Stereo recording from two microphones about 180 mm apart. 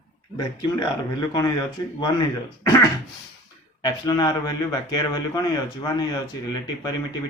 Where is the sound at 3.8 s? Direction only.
20° left (ahead or behind).